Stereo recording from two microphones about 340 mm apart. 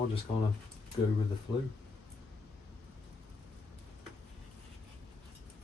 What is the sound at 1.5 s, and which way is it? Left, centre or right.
Speech, centre.